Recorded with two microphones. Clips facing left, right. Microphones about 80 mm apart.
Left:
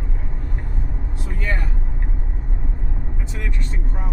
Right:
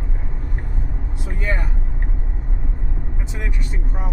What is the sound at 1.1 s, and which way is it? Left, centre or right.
Vehicle, right.